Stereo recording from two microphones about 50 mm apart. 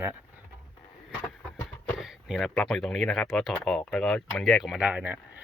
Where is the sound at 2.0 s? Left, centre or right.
Centre.